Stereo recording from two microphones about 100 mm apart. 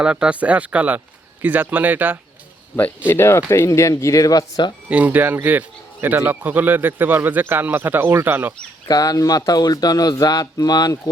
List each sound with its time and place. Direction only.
0.0 s speech: 10° right (ahead or behind)
3.1 s speech: 25° left (ahead or behind)
4.9 s speech: 15° right (ahead or behind)
8.9 s speech: 40° left (ahead or behind)